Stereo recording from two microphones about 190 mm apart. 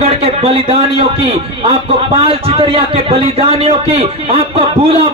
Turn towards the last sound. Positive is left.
turn(degrees=-30)  # may be behind; listen again after turning